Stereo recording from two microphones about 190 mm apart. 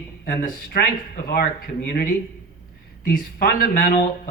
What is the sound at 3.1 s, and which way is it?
Speech, 50° left (ahead or behind).